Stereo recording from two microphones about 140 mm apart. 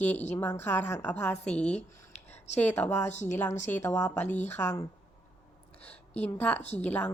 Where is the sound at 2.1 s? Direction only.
55° left (ahead or behind).